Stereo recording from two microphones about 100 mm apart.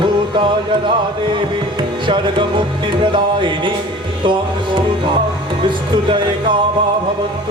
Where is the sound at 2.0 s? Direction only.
55° right (ahead or behind).